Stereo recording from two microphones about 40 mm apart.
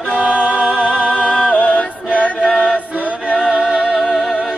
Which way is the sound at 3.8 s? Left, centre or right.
Centre.